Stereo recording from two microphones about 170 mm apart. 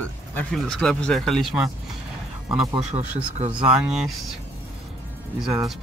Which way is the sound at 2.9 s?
35° right (ahead or behind).